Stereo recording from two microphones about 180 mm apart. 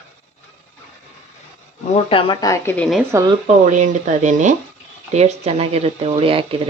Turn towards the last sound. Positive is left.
turn(degrees=-30)  # may be behind; listen again after turning